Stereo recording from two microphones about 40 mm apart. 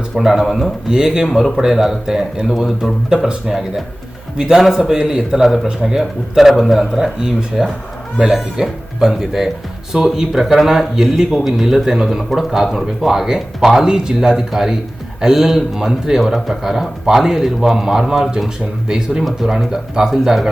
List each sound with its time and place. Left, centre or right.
0.2 s speech: centre
0.9 s speech: centre
1.3 s speech: centre